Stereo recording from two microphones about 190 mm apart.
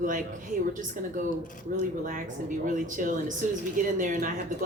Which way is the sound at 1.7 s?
50° right (ahead or behind).